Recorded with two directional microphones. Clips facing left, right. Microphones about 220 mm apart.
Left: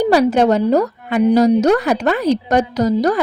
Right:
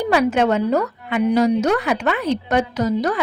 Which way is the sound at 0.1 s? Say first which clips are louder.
Left 2 dB; 35° left (ahead or behind).